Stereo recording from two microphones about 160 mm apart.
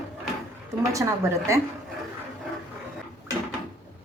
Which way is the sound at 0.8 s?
20° right (ahead or behind).